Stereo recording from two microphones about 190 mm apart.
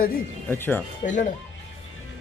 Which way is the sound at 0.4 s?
10° left (ahead or behind).